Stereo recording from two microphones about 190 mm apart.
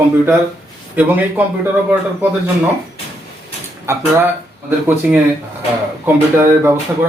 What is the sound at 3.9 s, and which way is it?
Speech, 15° right (ahead or behind).